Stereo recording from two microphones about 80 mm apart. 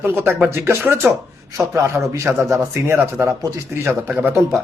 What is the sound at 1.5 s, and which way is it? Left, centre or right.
Speech, right.